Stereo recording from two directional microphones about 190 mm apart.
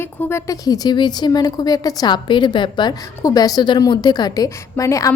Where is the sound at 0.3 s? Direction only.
15° left (ahead or behind).